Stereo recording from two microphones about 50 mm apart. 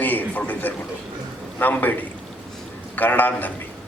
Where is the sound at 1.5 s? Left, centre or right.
Left.